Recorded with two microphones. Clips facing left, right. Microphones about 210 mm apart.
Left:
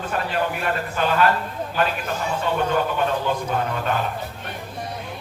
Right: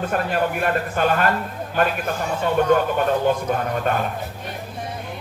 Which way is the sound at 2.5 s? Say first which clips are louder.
Right 5 dB; 50° right (ahead or behind).